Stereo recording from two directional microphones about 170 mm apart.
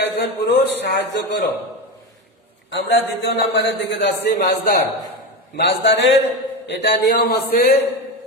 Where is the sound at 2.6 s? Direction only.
90° left; by 4.8 s 65° left (ahead or behind).